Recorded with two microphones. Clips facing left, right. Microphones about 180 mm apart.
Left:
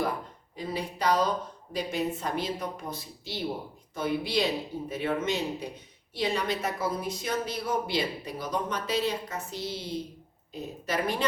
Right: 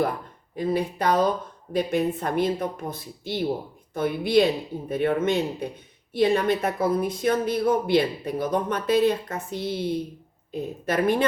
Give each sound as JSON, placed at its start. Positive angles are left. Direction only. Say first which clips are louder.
{"t": 0.5, "sound": "a woman's voice", "louder": "right 9 dB", "side_deg": -55}